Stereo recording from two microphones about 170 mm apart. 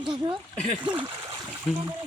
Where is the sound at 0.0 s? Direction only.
30° right (ahead or behind).